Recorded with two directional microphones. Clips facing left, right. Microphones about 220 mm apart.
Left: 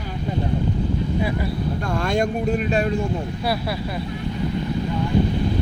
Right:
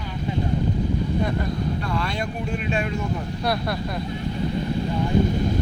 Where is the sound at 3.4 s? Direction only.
5° left (ahead or behind).